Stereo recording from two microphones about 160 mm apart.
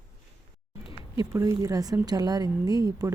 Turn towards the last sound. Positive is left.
turn(degrees=-20)  # may be behind; listen again after turning